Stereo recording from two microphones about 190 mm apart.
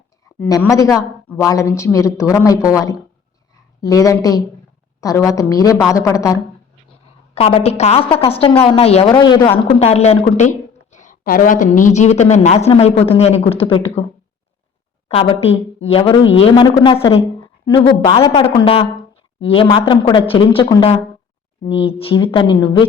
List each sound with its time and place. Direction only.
0.7 s a woman's voice: 15° left (ahead or behind)
7.3 s a woman's voice: 30° left (ahead or behind)
15.0 s a woman's voice: 30° left (ahead or behind)